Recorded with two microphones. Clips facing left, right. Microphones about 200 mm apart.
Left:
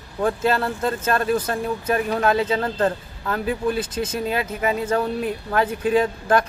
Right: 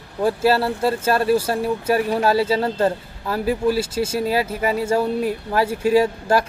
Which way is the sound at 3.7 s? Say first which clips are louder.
Right 3 dB; 10° right (ahead or behind).